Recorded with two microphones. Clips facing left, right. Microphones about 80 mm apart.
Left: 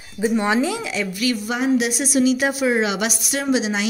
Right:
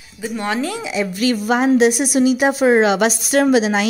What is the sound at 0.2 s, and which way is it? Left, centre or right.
Speech, centre.